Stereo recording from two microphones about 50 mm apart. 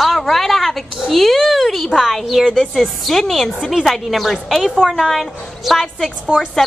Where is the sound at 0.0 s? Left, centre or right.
Centre.